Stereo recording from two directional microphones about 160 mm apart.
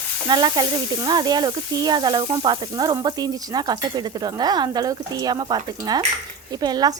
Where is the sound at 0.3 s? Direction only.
30° right (ahead or behind).